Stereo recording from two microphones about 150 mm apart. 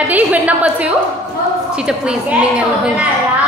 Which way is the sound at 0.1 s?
10° right (ahead or behind).